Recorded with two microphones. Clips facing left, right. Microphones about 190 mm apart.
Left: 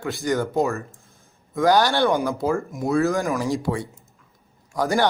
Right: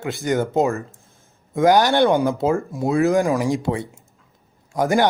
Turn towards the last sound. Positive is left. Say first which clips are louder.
# right 3 dB
turn(degrees=-20)  # may be behind; listen again after turning